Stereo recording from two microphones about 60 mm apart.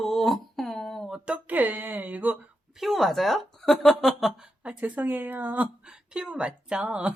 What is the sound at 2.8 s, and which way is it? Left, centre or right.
Speech, centre.